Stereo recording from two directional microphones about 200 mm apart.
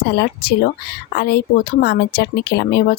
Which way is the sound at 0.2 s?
55° left (ahead or behind).